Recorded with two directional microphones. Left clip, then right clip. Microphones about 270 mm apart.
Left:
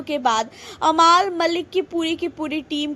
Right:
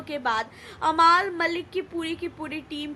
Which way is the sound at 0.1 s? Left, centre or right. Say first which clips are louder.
Left 6 dB; centre.